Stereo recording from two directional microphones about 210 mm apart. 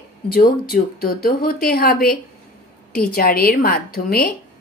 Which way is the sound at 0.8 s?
45° left (ahead or behind).